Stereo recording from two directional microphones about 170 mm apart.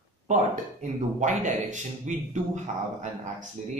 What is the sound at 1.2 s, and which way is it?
A man's voice, 45° right (ahead or behind).